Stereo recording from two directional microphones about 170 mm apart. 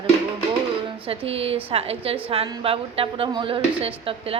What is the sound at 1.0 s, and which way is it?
Speech, 35° right (ahead or behind).